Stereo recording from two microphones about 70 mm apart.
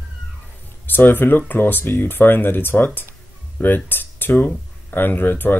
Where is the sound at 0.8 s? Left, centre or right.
Left.